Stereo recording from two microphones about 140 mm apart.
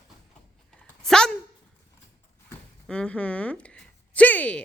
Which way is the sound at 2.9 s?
10° left (ahead or behind).